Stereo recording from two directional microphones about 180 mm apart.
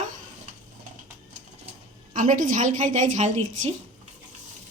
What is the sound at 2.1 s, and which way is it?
A woman's voice, 45° right (ahead or behind).